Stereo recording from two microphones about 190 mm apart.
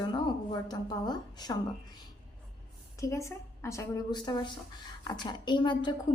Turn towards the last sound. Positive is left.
turn(degrees=25)  # may be behind; listen again after turning